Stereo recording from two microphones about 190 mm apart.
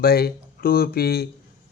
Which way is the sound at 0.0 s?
55° left (ahead or behind).